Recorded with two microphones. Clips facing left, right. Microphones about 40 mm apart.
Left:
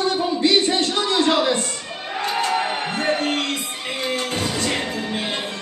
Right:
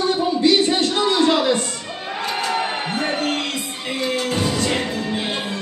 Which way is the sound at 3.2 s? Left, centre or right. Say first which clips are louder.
Even; left.